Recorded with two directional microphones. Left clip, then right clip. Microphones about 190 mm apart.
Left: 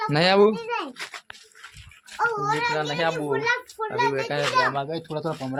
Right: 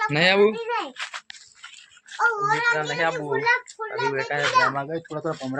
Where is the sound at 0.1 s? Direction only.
15° left (ahead or behind).